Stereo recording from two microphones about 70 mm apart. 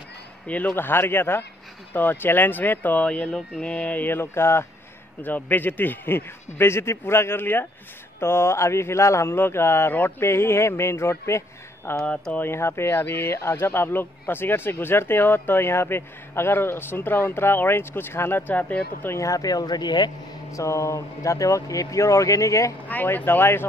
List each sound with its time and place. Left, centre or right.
0.5 s speech: left
5.2 s speech: left
12.1 s speech: centre
12.4 s speech: left
18.5 s speech: left
19.0 s speech: left
20.5 s speech: left
23.0 s speech: left